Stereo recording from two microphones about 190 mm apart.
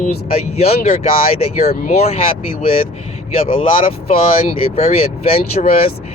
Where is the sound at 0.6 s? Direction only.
35° left (ahead or behind).